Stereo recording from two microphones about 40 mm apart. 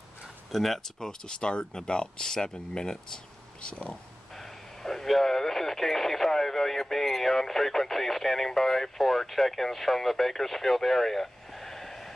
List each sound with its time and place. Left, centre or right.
0.5 s speech: centre
0.9 s speech: centre
4.8 s radio: centre